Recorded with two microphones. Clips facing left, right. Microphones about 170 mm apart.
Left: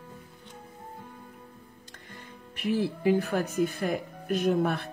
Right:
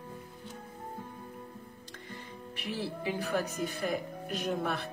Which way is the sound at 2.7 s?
50° left (ahead or behind).